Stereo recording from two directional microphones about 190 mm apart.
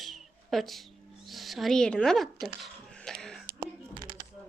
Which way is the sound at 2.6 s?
5° left (ahead or behind).